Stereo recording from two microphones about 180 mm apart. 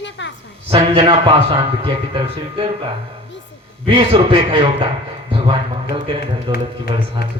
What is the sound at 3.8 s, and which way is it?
A man's voice, 30° right (ahead or behind).